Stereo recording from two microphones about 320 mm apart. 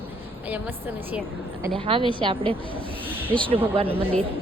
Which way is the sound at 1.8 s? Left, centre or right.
Centre.